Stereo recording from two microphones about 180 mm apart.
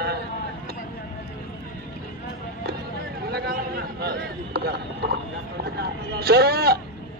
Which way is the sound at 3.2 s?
65° right (ahead or behind).